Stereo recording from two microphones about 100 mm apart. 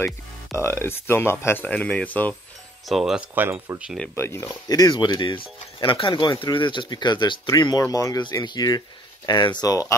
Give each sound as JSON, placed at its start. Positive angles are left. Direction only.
{"t": 0.6, "sound": "speech", "side_deg": 25}
{"t": 2.9, "sound": "speech", "side_deg": 0}
{"t": 3.2, "sound": "speech", "side_deg": -15}
{"t": 4.1, "sound": "speech", "side_deg": 25}
{"t": 4.6, "sound": "speech", "side_deg": 40}
{"t": 9.7, "sound": "speech", "side_deg": 35}